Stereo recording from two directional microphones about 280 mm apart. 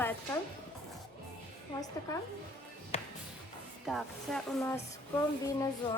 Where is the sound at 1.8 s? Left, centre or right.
Centre.